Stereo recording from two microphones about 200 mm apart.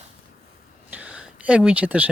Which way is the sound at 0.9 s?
5° right (ahead or behind).